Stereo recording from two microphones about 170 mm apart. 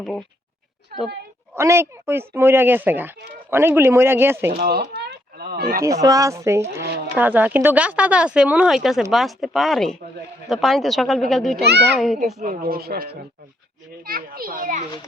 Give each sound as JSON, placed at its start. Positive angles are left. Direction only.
{"t": 0.0, "sound": "speech", "side_deg": 5}
{"t": 1.5, "sound": "speech", "side_deg": -15}
{"t": 4.6, "sound": "a sound", "side_deg": -70}
{"t": 5.8, "sound": "speech", "side_deg": -20}
{"t": 11.6, "sound": "a child's voice", "side_deg": -80}
{"t": 11.9, "sound": "speech", "side_deg": 0}
{"t": 12.5, "sound": "a child's voice", "side_deg": -60}